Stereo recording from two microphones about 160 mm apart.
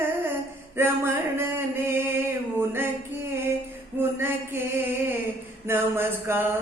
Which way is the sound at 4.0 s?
15° right (ahead or behind).